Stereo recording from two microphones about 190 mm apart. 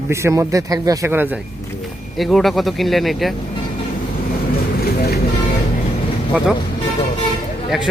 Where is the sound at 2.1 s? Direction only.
Centre (ahead or behind).